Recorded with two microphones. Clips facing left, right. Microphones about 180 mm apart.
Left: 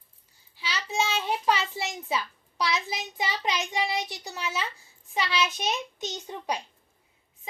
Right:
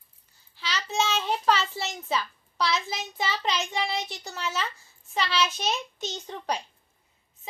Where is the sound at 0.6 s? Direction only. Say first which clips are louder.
Right 1 dB; 10° left (ahead or behind).